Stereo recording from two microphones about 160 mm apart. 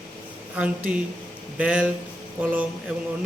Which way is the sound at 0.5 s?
5° right (ahead or behind).